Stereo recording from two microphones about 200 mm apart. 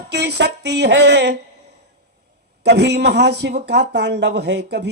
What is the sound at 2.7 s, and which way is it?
A man's voice, 60° right (ahead or behind).